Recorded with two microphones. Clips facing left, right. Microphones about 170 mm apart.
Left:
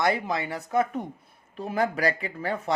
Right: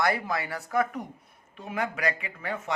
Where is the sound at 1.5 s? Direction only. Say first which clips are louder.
Left 5 dB; 35° left (ahead or behind).